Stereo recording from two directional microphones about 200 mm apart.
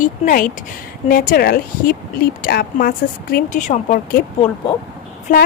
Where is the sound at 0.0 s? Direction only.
40° left (ahead or behind).